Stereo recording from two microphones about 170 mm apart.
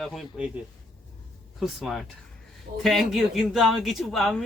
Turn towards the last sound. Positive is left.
turn(degrees=0)  # may be behind; listen again after turning